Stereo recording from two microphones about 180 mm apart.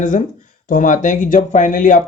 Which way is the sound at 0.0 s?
45° left (ahead or behind).